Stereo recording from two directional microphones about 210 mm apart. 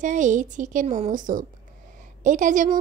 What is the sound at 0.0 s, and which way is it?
A woman's voice, 35° right (ahead or behind).